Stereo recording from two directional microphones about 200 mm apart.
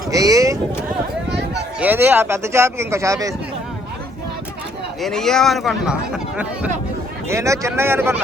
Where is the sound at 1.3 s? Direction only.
60° right (ahead or behind).